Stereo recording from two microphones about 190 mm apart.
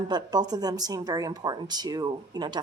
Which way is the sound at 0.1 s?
20° right (ahead or behind).